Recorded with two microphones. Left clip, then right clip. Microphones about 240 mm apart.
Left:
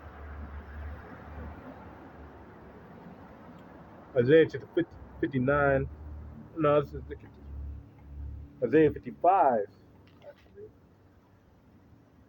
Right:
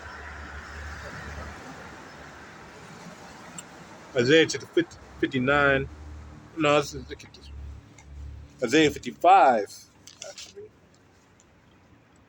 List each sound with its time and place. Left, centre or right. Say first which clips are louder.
4.1 s speech: right 2 dB; centre
8.6 s speech: right 2 dB; centre